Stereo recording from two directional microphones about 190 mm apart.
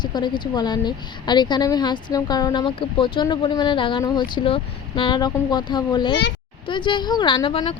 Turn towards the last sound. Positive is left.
turn(degrees=25)  # may be behind; listen again after turning